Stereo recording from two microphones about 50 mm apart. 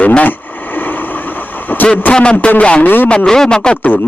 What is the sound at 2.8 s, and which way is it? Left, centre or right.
Speech, left.